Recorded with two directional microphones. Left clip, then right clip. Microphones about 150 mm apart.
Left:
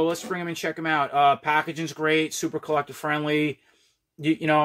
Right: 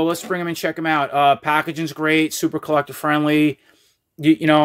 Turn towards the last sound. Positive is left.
turn(degrees=-50)  # may be behind; listen again after turning